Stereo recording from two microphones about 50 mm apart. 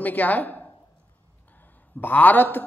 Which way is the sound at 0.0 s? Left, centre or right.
Left.